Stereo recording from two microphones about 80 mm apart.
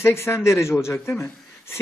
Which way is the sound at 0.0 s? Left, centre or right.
Left.